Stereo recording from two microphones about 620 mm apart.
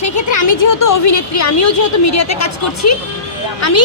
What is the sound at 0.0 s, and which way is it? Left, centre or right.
A woman's voice, left.